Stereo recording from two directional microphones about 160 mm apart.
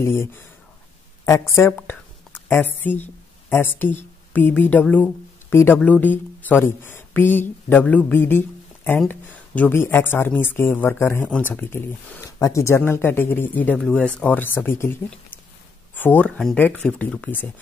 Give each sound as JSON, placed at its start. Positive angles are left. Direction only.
{"t": 0.0, "sound": "speech", "side_deg": 15}